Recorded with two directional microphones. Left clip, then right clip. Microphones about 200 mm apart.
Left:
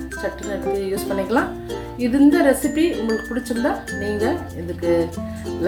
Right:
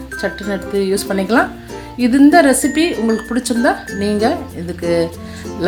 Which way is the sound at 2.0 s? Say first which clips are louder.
Right 6 dB; 45° right (ahead or behind).